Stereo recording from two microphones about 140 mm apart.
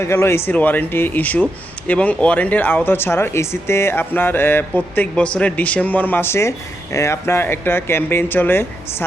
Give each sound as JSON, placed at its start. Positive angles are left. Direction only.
{"t": 0.0, "sound": "speech", "side_deg": 20}